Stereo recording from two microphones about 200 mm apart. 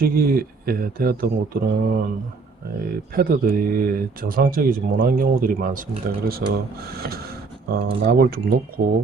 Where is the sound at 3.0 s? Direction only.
45° right (ahead or behind).